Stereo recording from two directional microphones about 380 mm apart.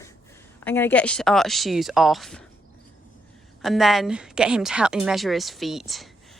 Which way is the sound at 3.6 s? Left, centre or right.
Centre.